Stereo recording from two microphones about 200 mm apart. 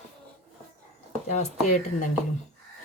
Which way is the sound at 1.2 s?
35° left (ahead or behind).